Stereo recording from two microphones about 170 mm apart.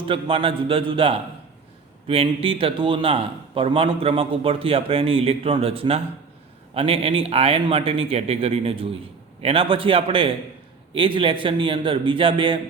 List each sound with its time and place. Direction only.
0.0 s a man's voice: 30° right (ahead or behind)